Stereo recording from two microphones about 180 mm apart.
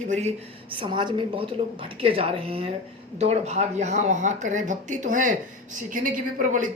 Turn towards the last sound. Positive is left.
turn(degrees=-50)  # may be behind; listen again after turning